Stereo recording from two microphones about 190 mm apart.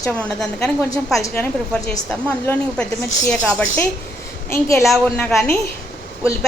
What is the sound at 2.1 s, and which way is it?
A woman's voice, 5° left (ahead or behind).